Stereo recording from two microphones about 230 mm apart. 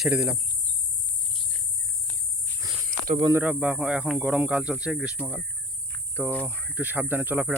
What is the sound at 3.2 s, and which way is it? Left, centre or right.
Speech, centre.